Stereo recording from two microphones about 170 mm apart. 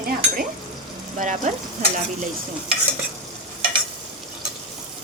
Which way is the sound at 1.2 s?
45° right (ahead or behind).